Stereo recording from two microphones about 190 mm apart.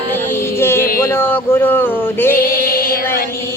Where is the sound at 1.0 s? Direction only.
10° left (ahead or behind).